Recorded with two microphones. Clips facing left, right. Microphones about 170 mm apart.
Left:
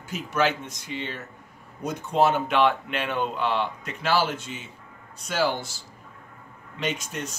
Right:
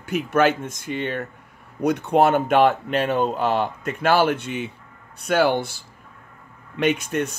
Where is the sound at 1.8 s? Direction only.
65° right (ahead or behind).